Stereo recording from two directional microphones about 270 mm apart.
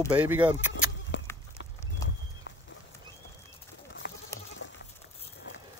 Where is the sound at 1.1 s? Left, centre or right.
Left.